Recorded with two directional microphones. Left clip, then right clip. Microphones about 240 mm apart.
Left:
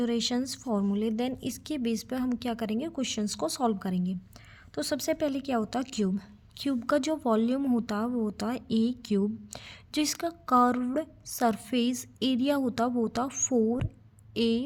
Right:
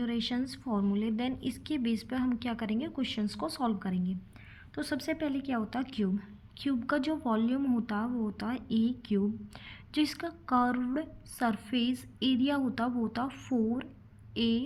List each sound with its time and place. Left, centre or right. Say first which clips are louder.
0.0 s a woman's voice: left 5 dB; left
6.1 s a woman's voice: left 3 dB; left
13.2 s a woman's voice: left 6 dB; left
14.3 s a woman's voice: left 4 dB; left